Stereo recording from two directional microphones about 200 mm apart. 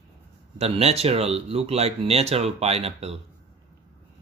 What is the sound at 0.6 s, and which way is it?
Speech, 30° right (ahead or behind).